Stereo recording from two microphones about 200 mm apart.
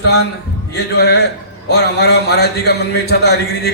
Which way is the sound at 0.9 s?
55° left (ahead or behind).